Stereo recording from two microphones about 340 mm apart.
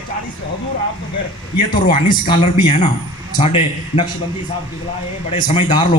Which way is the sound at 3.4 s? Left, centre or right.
Centre.